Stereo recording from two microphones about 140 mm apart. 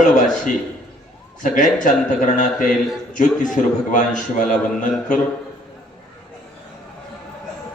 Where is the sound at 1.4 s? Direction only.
65° left (ahead or behind).